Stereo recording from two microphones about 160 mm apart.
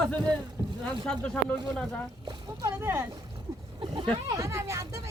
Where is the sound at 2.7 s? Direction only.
15° right (ahead or behind).